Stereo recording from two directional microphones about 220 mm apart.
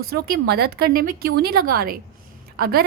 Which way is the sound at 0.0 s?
45° right (ahead or behind).